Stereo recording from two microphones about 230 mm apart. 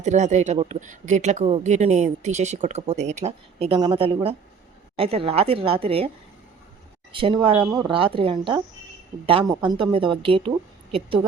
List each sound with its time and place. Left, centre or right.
0.0 s speech: right
7.1 s speech: right